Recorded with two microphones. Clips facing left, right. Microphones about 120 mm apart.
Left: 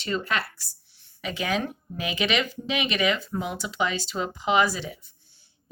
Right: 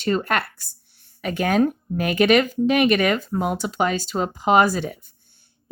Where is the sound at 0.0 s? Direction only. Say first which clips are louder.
Right 6 dB; 50° right (ahead or behind).